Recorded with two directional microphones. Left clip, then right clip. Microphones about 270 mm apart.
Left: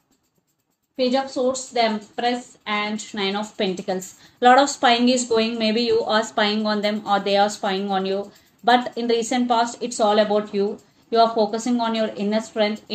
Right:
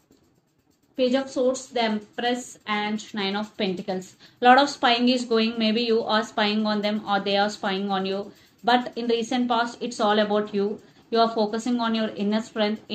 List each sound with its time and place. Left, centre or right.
0.9 s speech: left